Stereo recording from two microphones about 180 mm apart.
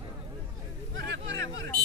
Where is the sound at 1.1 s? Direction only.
85° right.